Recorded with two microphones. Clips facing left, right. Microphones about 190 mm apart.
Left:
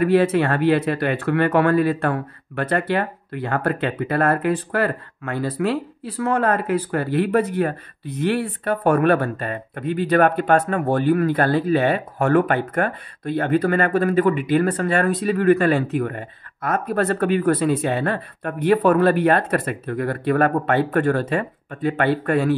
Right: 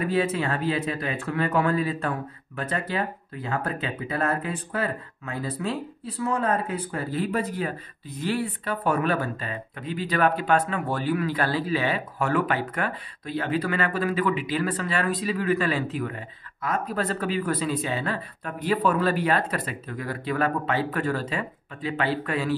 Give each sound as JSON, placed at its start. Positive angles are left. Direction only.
{"t": 0.0, "sound": "speech", "side_deg": 70}
{"t": 7.2, "sound": "speech", "side_deg": 55}